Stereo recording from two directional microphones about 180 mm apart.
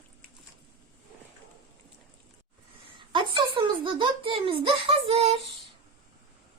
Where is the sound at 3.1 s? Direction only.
25° right (ahead or behind).